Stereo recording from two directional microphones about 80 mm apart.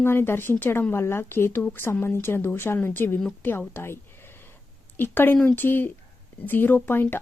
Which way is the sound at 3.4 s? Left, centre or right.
Left.